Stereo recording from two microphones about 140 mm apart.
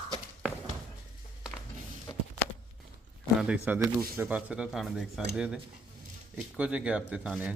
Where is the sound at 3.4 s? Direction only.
10° right (ahead or behind).